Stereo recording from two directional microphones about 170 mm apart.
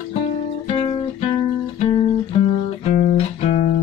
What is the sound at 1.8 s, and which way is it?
Music, 30° left (ahead or behind).